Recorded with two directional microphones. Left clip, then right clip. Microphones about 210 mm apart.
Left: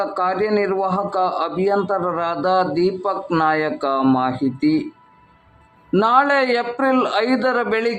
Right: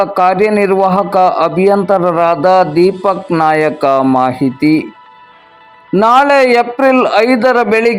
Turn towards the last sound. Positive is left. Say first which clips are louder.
# right 9 dB
turn(degrees=-25)  # may be behind; listen again after turning